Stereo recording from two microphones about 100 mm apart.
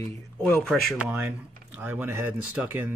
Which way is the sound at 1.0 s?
15° right (ahead or behind).